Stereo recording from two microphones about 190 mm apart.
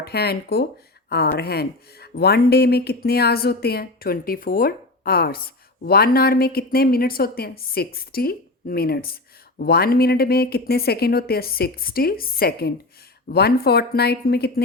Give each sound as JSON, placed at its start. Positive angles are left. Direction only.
{"t": 0.0, "sound": "a woman's voice", "side_deg": 55}